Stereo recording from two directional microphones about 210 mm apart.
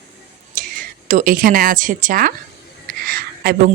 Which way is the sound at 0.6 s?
40° right (ahead or behind).